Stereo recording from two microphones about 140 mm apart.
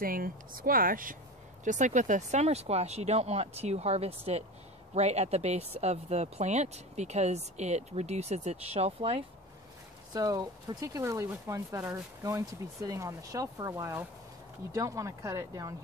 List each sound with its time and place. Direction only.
0.0 s speech: 90° right
1.6 s speech: 60° right (ahead or behind)
10.1 s speech: 30° right (ahead or behind)